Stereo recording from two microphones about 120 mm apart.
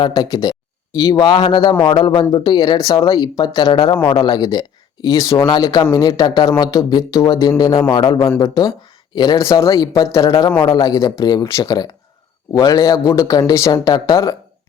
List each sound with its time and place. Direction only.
0.0 s speech: 35° left (ahead or behind)